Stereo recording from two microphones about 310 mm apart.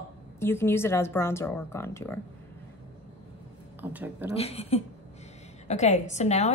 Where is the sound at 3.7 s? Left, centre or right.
Centre.